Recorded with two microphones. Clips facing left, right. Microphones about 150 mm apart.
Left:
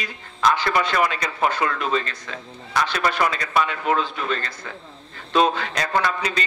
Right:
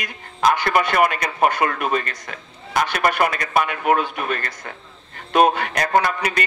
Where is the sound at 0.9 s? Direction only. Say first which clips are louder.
Right 3 dB; 55° right (ahead or behind).